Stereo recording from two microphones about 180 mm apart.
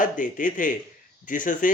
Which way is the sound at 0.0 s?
50° left (ahead or behind).